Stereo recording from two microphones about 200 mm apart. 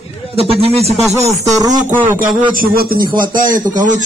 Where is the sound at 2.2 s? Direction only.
45° right (ahead or behind).